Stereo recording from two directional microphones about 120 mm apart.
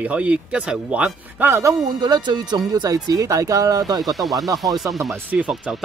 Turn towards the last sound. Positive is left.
turn(degrees=-10)  # may be behind; listen again after turning